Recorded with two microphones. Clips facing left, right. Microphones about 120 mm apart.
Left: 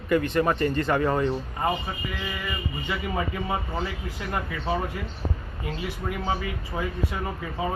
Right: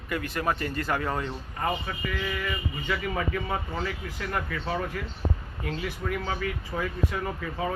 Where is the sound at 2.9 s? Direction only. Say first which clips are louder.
Even; 15° left (ahead or behind).